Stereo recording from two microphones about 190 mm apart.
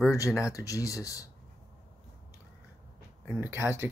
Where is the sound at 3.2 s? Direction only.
15° right (ahead or behind).